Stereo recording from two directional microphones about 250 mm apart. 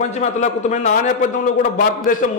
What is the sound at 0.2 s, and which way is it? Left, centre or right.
A man's voice, left.